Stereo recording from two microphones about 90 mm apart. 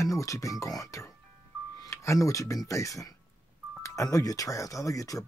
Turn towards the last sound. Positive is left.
turn(degrees=40)  # may be behind; listen again after turning